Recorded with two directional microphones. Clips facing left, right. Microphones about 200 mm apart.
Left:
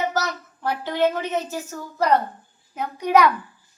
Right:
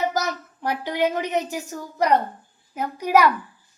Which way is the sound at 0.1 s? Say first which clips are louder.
Even; 15° right (ahead or behind).